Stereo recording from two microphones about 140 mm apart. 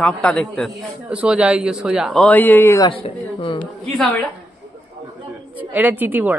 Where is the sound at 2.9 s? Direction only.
40° left (ahead or behind).